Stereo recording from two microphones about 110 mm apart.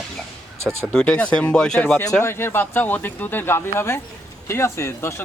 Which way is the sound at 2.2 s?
20° left (ahead or behind).